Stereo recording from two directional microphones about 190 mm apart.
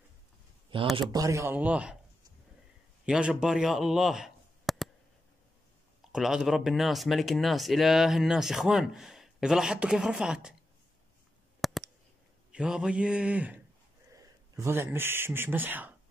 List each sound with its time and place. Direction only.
0.7 s speech: 25° right (ahead or behind)
1.1 s speech: 15° right (ahead or behind)
3.1 s speech: 5° right (ahead or behind)
6.1 s speech: centre (ahead or behind)
11.6 s a sound: centre (ahead or behind)
12.5 s speech: 5° right (ahead or behind)